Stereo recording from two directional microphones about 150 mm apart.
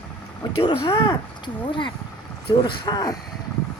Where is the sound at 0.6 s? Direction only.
35° left (ahead or behind).